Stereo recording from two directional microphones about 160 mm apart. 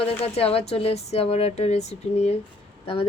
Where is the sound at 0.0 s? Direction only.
40° left (ahead or behind).